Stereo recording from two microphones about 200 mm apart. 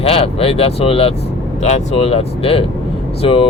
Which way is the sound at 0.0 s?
30° left (ahead or behind).